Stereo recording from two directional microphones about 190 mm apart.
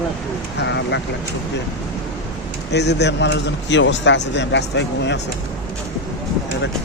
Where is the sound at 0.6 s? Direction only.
70° left (ahead or behind).